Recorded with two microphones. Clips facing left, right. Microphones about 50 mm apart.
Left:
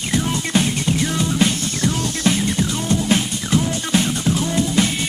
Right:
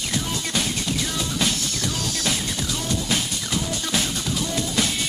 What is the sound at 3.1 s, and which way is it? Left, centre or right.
Music, left.